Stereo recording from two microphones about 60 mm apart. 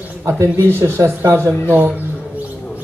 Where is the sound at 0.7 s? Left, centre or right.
Right.